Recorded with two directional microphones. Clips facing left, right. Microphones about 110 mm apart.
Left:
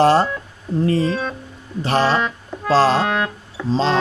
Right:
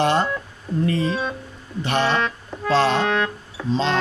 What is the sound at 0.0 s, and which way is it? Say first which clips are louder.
Speech: left 5 dB; 35° left (ahead or behind).